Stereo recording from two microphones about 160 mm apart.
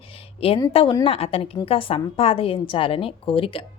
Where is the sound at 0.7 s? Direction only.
35° left (ahead or behind).